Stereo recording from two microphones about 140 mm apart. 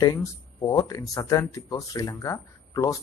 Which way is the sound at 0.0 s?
30° left (ahead or behind).